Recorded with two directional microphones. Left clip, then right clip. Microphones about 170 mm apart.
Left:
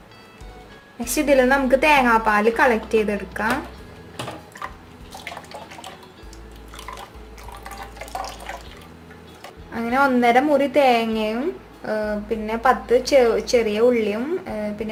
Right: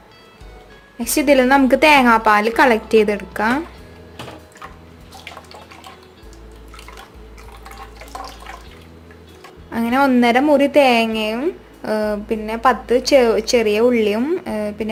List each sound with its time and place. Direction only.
0.9 s a woman's voice: 45° right (ahead or behind)
9.7 s a woman's voice: 35° right (ahead or behind)